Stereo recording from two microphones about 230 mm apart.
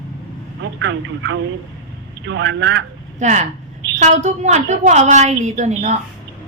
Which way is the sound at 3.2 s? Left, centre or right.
Right.